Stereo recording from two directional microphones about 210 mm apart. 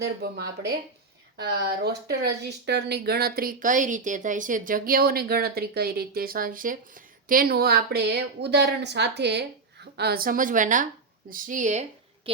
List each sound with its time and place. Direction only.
0.0 s a woman's voice: 50° right (ahead or behind); by 12.3 s 35° right (ahead or behind)